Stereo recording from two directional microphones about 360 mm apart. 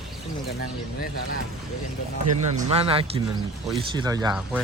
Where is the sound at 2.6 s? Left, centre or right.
Centre.